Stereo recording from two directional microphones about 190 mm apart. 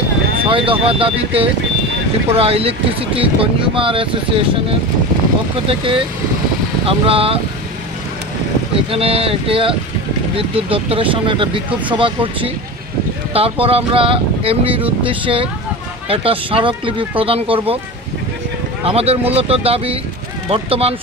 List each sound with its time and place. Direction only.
0.5 s speech: 30° right (ahead or behind)
5.7 s speech: 25° right (ahead or behind)
8.9 s speech: 30° right (ahead or behind)
18.9 s speech: 30° right (ahead or behind)